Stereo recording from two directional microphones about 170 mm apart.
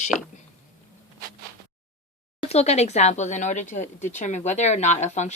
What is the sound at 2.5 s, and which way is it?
Speech, 40° left (ahead or behind).